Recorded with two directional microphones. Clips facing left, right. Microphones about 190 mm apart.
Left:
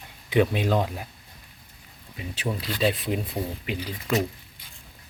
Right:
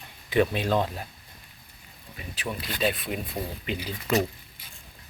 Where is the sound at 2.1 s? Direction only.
25° left (ahead or behind).